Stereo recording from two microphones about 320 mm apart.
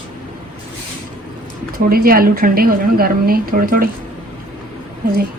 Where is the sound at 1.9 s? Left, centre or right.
Right.